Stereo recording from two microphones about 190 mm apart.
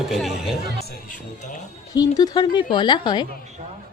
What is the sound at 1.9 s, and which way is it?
Speech, 20° left (ahead or behind).